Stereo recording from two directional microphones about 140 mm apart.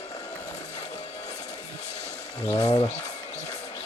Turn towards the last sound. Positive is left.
turn(degrees=25)  # may be behind; listen again after turning